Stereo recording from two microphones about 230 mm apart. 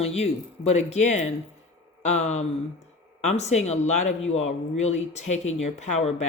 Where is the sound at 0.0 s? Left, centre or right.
Left.